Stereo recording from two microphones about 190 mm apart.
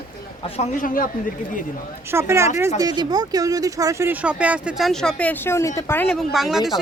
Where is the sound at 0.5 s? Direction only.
40° left (ahead or behind).